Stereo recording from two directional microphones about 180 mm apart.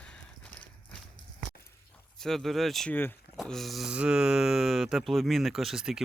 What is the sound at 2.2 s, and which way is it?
Speech, centre (ahead or behind).